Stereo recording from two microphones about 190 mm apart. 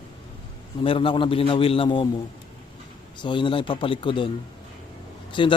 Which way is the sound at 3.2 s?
25° left (ahead or behind).